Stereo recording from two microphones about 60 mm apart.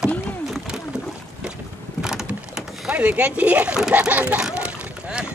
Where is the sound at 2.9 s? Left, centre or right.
Right.